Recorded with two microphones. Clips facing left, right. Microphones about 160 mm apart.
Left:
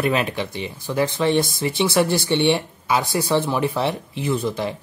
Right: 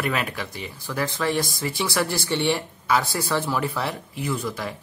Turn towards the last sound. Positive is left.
turn(degrees=25)  # may be behind; listen again after turning